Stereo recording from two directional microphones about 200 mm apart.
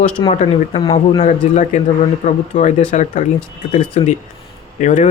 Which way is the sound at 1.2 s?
35° left (ahead or behind).